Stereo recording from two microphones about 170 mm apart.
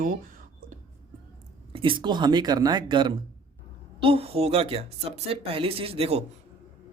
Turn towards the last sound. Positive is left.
turn(degrees=-35)  # may be behind; listen again after turning